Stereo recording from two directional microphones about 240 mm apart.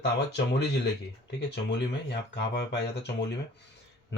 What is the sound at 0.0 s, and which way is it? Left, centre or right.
Speech, left.